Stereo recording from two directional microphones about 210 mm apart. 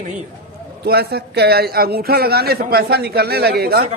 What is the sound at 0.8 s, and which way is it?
A man's voice, 50° right (ahead or behind).